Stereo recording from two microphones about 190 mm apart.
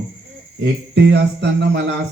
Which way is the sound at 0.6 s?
60° right (ahead or behind).